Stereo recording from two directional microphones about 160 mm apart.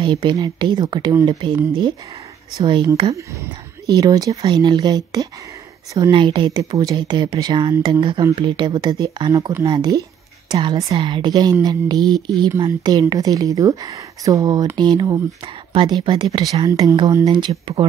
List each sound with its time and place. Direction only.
0.0 s a woman's voice: 30° right (ahead or behind)
3.2 s a woman's voice: 20° right (ahead or behind)